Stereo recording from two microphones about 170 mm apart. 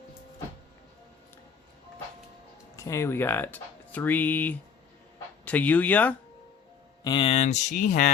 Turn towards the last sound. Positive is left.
turn(degrees=45)  # may be behind; listen again after turning